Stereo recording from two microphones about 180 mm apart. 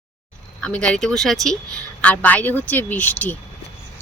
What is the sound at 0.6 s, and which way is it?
Speech, 5° left (ahead or behind).